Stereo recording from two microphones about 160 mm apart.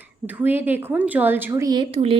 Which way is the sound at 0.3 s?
10° right (ahead or behind).